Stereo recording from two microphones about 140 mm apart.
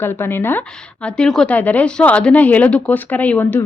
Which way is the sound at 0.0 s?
15° left (ahead or behind).